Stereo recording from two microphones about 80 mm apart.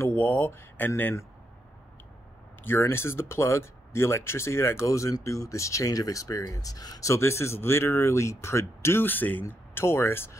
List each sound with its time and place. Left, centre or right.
0.0 s speech: left
2.6 s speech: left